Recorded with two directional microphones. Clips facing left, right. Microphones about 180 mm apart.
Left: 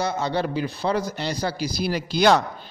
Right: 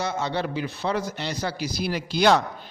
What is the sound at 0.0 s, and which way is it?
Speech, 35° left (ahead or behind).